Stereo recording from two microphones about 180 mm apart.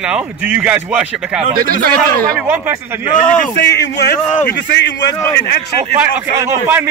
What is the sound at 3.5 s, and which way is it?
Speech, 70° left (ahead or behind).